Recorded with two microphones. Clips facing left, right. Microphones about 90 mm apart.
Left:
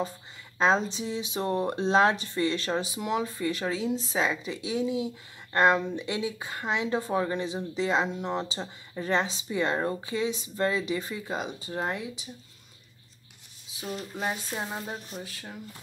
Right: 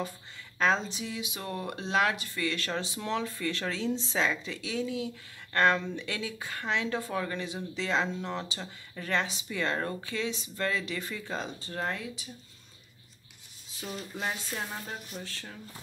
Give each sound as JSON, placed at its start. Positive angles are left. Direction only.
{"t": 0.6, "sound": "a woman's voice", "side_deg": 20}
{"t": 14.1, "sound": "music", "side_deg": 15}